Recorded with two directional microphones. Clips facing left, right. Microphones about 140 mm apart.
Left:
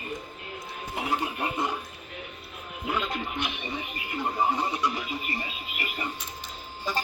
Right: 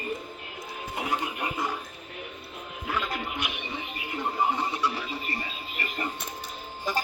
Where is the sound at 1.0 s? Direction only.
25° left (ahead or behind).